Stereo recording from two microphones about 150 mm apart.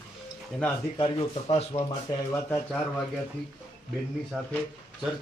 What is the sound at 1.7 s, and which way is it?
Speech, 20° left (ahead or behind).